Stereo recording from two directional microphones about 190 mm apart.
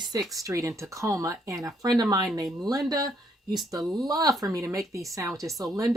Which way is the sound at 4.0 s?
20° right (ahead or behind).